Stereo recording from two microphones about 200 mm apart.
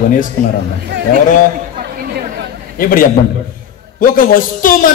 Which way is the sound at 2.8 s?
45° left (ahead or behind).